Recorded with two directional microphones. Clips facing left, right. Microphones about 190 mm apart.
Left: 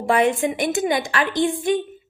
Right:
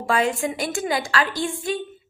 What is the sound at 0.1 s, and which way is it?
A woman's voice, 20° left (ahead or behind).